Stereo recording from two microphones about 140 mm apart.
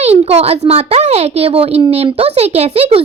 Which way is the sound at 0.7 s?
50° right (ahead or behind).